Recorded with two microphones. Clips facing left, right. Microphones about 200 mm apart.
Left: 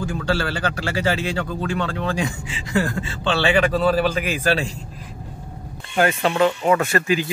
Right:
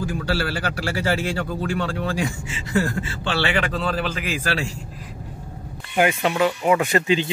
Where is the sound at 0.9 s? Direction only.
20° left (ahead or behind).